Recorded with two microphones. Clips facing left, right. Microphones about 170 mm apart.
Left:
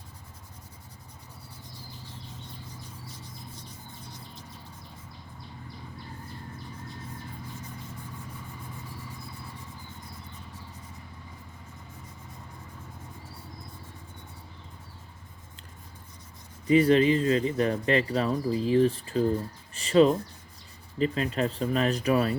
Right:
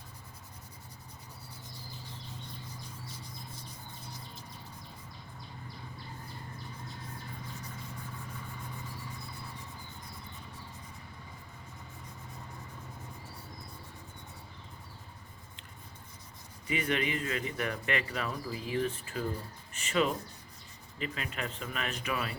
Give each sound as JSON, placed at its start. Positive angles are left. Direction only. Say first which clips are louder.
{"t": 16.6, "sound": "speech", "louder": "left 12 dB", "side_deg": 35}